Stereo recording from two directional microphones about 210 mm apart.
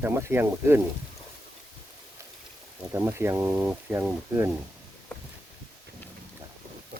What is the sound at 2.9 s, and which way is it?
Mantra, 10° right (ahead or behind).